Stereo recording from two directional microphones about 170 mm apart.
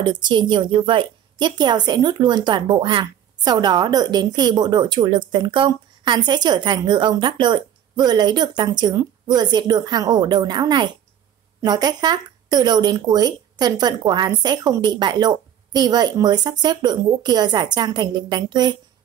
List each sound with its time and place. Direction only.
0.0 s a woman's voice: 25° right (ahead or behind)